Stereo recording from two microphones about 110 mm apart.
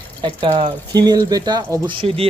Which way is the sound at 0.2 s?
45° right (ahead or behind).